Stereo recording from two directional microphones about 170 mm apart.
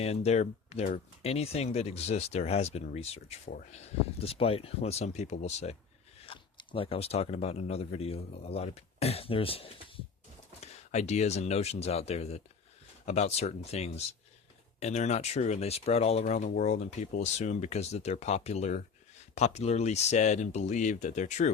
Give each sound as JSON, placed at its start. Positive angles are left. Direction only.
{"t": 0.0, "sound": "speech", "side_deg": 40}
{"t": 6.2, "sound": "speech", "side_deg": 30}